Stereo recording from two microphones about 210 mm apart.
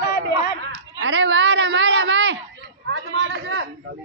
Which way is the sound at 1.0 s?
60° right (ahead or behind).